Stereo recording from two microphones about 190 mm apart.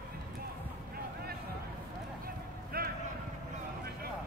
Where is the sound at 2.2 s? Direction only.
50° right (ahead or behind).